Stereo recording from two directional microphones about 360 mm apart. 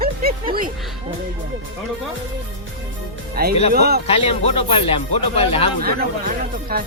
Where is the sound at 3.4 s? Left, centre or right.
Right.